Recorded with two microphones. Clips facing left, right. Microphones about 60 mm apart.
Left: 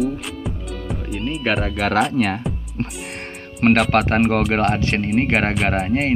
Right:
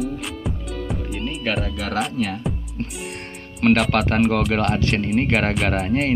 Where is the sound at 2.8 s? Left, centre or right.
Left.